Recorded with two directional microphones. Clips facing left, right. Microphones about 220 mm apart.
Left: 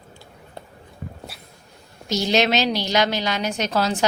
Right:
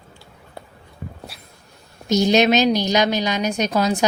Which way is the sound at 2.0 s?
15° right (ahead or behind).